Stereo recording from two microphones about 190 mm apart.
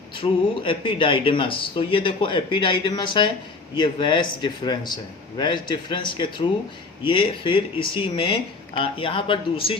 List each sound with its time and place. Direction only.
0.2 s speech: 25° left (ahead or behind)